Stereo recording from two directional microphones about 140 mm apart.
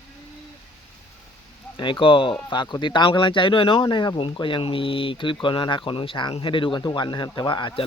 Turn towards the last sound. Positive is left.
turn(degrees=35)  # may be behind; listen again after turning